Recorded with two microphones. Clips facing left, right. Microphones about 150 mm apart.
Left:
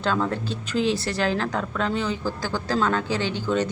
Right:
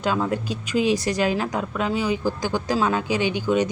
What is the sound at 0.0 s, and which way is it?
Speech, 10° right (ahead or behind).